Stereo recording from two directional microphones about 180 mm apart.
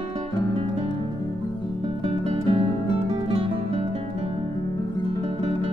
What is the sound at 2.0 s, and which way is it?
Music, 30° right (ahead or behind).